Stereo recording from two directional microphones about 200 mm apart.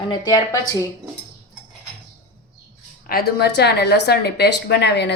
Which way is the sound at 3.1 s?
50° left (ahead or behind).